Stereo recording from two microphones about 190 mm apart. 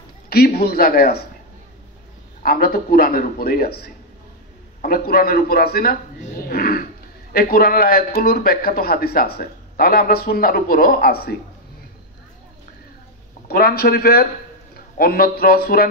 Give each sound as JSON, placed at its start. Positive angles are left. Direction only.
{"t": 0.6, "sound": "a man's voice", "side_deg": 55}
{"t": 2.4, "sound": "a man's voice", "side_deg": 50}
{"t": 6.4, "sound": "a sound", "side_deg": 50}
{"t": 7.3, "sound": "a man's voice", "side_deg": 55}
{"t": 13.5, "sound": "a man's voice", "side_deg": 55}